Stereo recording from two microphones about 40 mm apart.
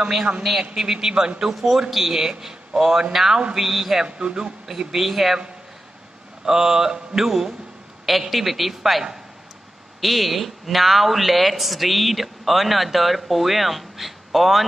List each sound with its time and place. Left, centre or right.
0.0 s speech: centre
0.4 s speech: centre
0.9 s speech: centre
1.5 s speech: centre
4.0 s speech: right
4.6 s speech: centre
6.4 s speech: centre